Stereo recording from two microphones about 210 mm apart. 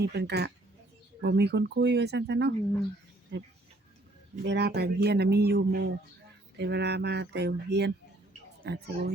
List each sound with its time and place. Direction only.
0.0 s speech: 50° right (ahead or behind)